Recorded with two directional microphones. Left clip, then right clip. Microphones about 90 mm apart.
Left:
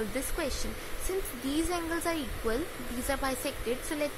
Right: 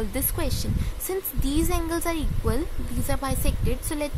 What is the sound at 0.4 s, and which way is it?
A woman's voice, 70° right (ahead or behind).